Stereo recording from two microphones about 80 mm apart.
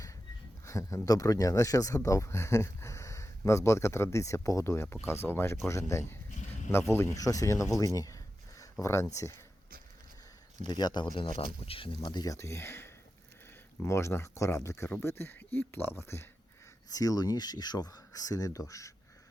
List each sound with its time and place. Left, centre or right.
0.6 s speech: left
7.2 s speech: left
10.7 s speech: left
12.2 s speech: left
16.9 s speech: left